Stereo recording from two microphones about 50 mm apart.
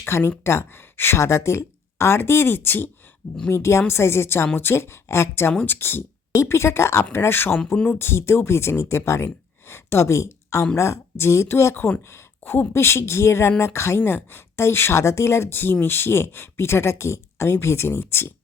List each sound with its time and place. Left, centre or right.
0.0 s speech: left
0.4 s speech: left
1.2 s speech: left
3.5 s speech: left
5.3 s speech: left
6.3 s speech: left
7.1 s speech: left
7.9 s speech: left
12.7 s speech: left
14.0 s speech: left